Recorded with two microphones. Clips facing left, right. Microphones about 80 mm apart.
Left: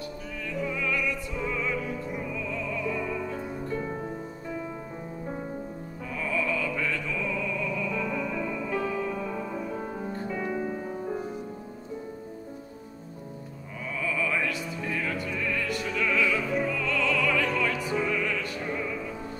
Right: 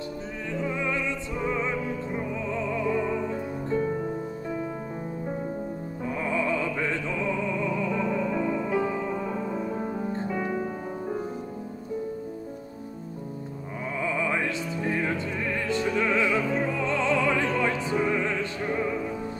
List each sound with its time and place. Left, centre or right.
0.6 s opera: right
6.1 s opera: right; by 10.0 s centre
10.3 s music: centre
14.0 s music: right